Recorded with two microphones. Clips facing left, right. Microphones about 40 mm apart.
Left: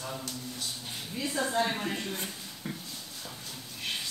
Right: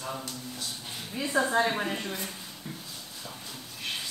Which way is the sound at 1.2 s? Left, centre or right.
Centre.